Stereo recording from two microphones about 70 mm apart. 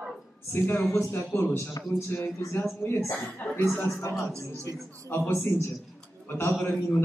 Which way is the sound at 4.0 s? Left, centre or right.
Left.